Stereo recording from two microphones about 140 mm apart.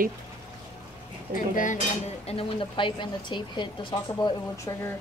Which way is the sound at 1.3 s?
70° left (ahead or behind).